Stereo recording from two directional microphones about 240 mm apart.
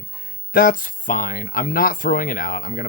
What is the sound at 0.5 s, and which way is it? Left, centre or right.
Speech, left.